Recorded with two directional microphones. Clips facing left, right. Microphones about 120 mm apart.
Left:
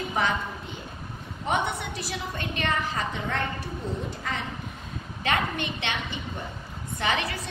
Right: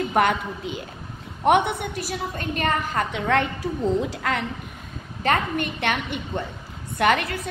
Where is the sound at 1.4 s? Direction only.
65° right (ahead or behind).